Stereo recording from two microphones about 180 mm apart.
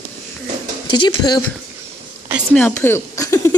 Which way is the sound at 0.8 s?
25° left (ahead or behind).